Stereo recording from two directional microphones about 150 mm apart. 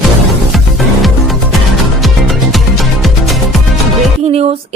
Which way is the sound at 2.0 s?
Centre (ahead or behind).